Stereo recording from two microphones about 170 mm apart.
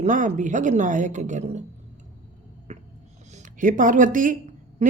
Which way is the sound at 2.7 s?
40° right (ahead or behind).